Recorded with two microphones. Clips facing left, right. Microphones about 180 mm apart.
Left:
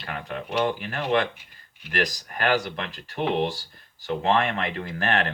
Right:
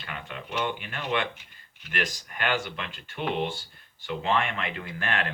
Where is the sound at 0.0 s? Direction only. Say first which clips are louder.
Left 6 dB; 40° left (ahead or behind).